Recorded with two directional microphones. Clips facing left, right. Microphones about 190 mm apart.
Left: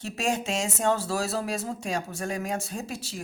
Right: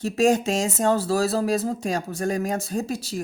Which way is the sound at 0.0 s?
40° right (ahead or behind).